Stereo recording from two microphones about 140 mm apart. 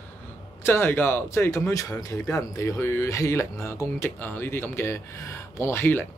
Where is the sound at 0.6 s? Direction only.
15° left (ahead or behind).